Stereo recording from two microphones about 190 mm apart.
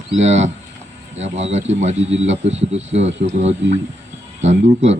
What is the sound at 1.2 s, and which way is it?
Speech, 35° right (ahead or behind).